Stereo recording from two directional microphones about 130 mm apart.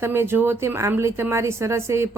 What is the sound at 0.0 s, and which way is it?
A woman's voice, 20° right (ahead or behind).